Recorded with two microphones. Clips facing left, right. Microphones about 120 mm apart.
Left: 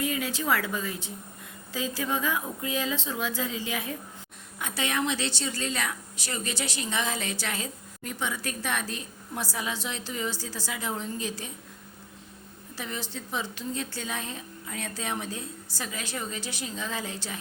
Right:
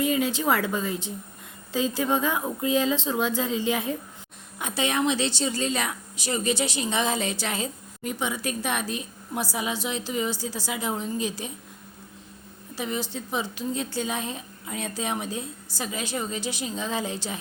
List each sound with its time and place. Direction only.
0.0 s a woman's voice: 20° right (ahead or behind)
12.7 s a woman's voice: 15° right (ahead or behind)